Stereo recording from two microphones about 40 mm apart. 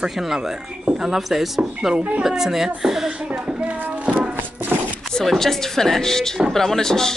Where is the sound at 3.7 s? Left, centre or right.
Right.